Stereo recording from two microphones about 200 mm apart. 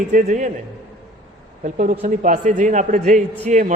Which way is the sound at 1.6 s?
40° right (ahead or behind).